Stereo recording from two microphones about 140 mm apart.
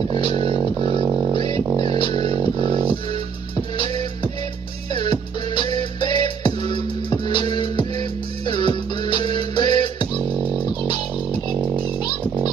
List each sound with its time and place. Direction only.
0.4 s music: 45° right (ahead or behind)
3.5 s music: 35° left (ahead or behind)
10.3 s music: 10° right (ahead or behind)